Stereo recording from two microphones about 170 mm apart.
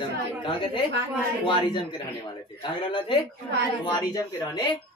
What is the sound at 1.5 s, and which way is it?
A woman's voice, 25° left (ahead or behind).